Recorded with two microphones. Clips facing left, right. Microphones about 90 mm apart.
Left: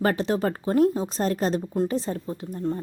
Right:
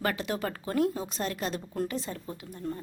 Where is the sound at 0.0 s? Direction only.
35° left (ahead or behind).